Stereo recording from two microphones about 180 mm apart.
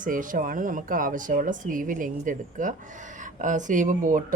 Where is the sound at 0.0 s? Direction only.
45° right (ahead or behind).